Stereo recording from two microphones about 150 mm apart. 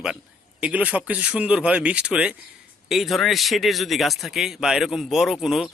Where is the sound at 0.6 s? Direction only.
10° right (ahead or behind).